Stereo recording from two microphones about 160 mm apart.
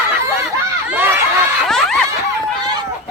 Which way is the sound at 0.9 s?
15° right (ahead or behind).